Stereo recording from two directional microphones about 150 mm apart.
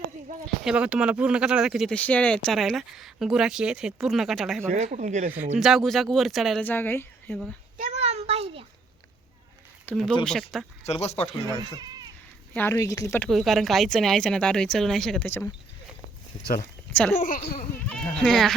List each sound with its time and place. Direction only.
0.4 s speech: 5° right (ahead or behind)
2.0 s speech: 10° left (ahead or behind)
4.7 s speech: 55° right (ahead or behind)
5.5 s speech: centre (ahead or behind)
6.6 s a woman's voice: 15° left (ahead or behind)
7.9 s a sound: 45° right (ahead or behind)
9.9 s speech: centre (ahead or behind)
10.8 s speech: 45° left (ahead or behind)
12.5 s speech: 15° left (ahead or behind)
13.1 s speech: centre (ahead or behind)
16.9 s speech: 5° left (ahead or behind)
17.2 s speech: 65° left (ahead or behind)
17.8 s speech: 5° left (ahead or behind)